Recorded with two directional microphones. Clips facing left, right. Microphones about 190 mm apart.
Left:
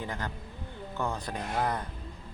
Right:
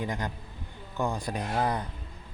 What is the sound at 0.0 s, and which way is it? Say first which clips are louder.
Speech: right 3 dB; 15° right (ahead or behind).